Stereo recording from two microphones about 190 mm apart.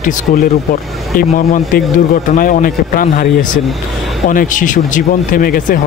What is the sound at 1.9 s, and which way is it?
Speech, 45° left (ahead or behind).